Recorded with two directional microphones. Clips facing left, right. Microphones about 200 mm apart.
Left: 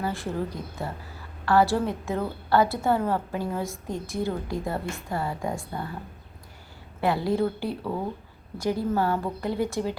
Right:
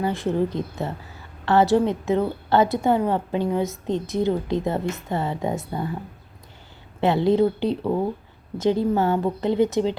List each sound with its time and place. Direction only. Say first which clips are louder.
0.0 s a woman's voice: right 7 dB; 20° right (ahead or behind)
7.0 s a woman's voice: right 6 dB; 20° right (ahead or behind)